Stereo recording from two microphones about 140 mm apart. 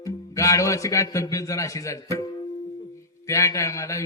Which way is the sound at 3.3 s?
20° left (ahead or behind).